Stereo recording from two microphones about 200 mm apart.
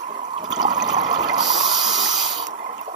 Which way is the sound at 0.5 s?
20° right (ahead or behind).